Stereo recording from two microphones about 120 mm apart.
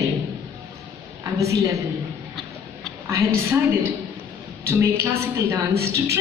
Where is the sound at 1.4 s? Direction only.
25° right (ahead or behind).